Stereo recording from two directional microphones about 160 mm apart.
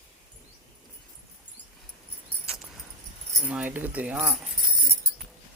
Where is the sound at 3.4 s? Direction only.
10° right (ahead or behind).